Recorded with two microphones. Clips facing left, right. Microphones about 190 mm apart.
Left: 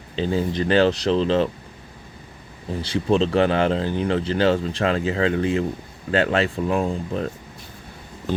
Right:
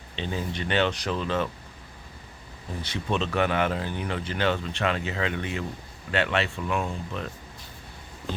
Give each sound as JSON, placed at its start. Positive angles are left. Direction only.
{"t": 0.2, "sound": "speech", "side_deg": 35}
{"t": 2.8, "sound": "speech", "side_deg": 30}